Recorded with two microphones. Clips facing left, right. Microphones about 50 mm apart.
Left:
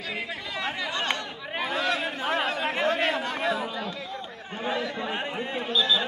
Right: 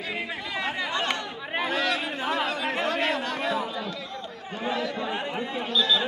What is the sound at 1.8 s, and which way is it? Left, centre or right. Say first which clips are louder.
Chatter: even; left.